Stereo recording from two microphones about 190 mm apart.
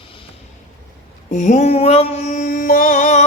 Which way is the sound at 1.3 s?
40° left (ahead or behind).